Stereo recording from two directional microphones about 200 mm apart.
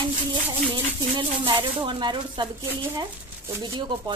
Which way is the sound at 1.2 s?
25° right (ahead or behind).